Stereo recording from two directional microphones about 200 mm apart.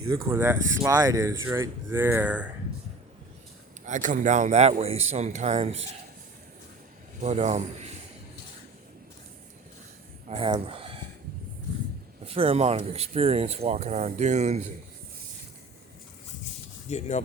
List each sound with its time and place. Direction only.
0.1 s speech: 15° right (ahead or behind)
3.8 s speech: 40° right (ahead or behind)
7.2 s speech: 35° right (ahead or behind)
10.2 s speech: 25° right (ahead or behind)
12.2 s speech: 30° right (ahead or behind)
16.9 s speech: 35° left (ahead or behind)